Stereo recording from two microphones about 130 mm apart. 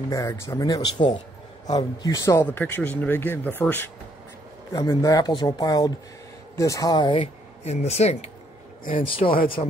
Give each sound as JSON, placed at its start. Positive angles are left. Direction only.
{"t": 0.1, "sound": "speech", "side_deg": 25}
{"t": 2.4, "sound": "speech", "side_deg": 15}
{"t": 4.7, "sound": "speech", "side_deg": 25}
{"t": 7.6, "sound": "speech", "side_deg": 55}
{"t": 8.9, "sound": "speech", "side_deg": 45}
{"t": 9.2, "sound": "speech", "side_deg": 90}